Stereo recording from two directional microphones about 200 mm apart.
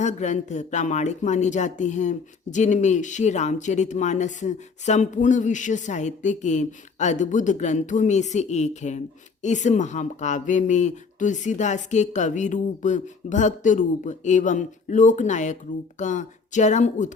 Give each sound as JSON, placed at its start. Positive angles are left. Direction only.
{"t": 0.0, "sound": "speech", "side_deg": 35}